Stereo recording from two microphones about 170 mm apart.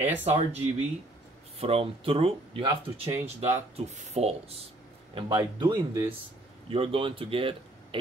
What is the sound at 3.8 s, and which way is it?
Speech, 40° right (ahead or behind).